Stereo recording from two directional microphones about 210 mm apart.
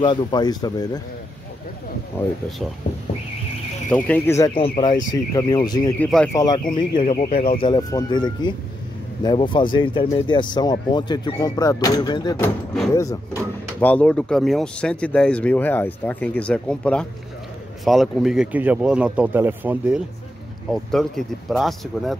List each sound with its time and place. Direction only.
0.0 s speech: 20° left (ahead or behind)
3.9 s speech: 10° left (ahead or behind)
4.6 s speech: 25° left (ahead or behind)
5.9 s speech: 5° left (ahead or behind)
6.3 s speech: 20° left (ahead or behind)
7.0 s speech: 35° left (ahead or behind)
7.4 s speech: 25° left (ahead or behind)
12.4 s speech: centre (ahead or behind)
12.9 s speech: 15° left (ahead or behind); by 22.1 s centre (ahead or behind)